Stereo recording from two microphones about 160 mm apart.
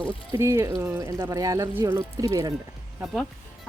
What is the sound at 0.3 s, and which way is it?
Speech, 20° right (ahead or behind).